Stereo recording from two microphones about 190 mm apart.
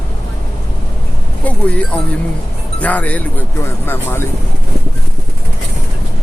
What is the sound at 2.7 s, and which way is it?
Speech, 10° left (ahead or behind).